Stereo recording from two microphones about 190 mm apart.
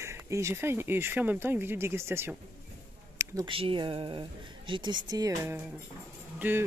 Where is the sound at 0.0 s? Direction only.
15° right (ahead or behind).